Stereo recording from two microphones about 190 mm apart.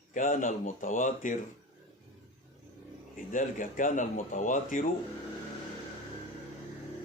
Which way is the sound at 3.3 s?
45° left (ahead or behind).